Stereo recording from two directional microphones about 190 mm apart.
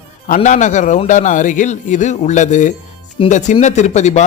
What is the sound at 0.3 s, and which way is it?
A man's voice, 40° left (ahead or behind).